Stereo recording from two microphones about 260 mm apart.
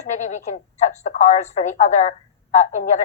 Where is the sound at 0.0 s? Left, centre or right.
Left.